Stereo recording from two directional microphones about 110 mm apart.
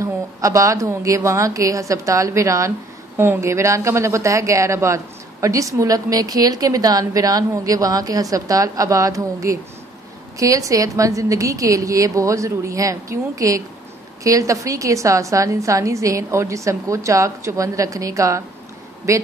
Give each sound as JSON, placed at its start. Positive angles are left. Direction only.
{"t": 0.0, "sound": "a woman's voice", "side_deg": -30}